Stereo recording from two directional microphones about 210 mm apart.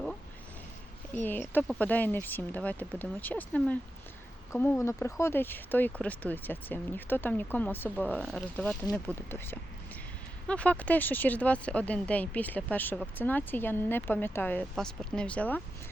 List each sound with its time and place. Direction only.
1.1 s speech: 10° left (ahead or behind)